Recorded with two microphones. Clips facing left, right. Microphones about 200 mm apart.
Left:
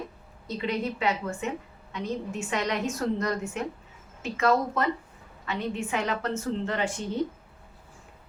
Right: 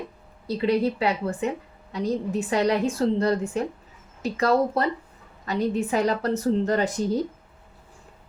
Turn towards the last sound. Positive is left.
turn(degrees=-40)  # may be behind; listen again after turning